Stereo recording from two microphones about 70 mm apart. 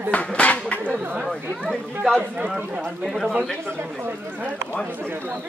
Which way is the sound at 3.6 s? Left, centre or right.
Right.